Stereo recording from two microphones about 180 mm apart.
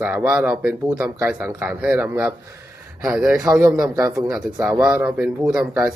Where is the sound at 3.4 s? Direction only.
20° right (ahead or behind).